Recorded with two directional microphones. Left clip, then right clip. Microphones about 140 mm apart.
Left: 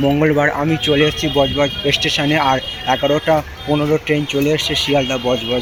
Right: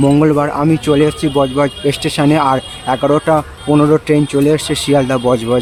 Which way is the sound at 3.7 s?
40° right (ahead or behind).